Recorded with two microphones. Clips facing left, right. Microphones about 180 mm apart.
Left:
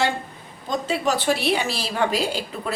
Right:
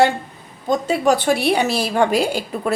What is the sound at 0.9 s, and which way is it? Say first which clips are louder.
A woman's voice: right 4 dB; 50° right (ahead or behind).